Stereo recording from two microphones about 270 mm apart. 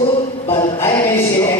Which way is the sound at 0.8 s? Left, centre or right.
Centre.